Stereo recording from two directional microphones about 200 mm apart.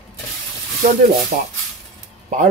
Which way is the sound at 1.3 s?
35° right (ahead or behind).